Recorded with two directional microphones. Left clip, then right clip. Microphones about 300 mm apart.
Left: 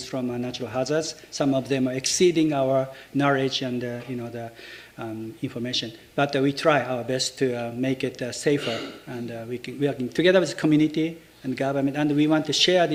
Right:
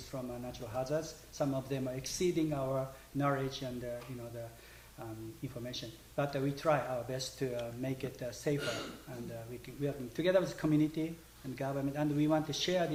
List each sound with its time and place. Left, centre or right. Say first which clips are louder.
0.1 s a man's voice: left 12 dB; left
4.9 s speech: left 12 dB; left
9.8 s speech: left 13 dB; left